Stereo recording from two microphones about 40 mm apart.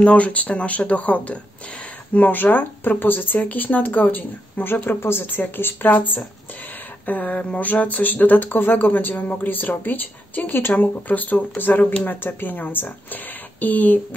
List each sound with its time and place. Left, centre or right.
0.0 s speech: left
4.8 s speech: left
5.2 s speech: left
10.7 s speech: left